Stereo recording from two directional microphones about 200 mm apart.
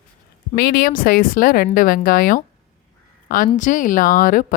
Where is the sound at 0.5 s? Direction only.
50° left (ahead or behind).